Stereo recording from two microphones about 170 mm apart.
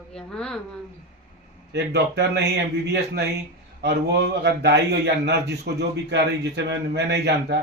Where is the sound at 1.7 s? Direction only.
80° right.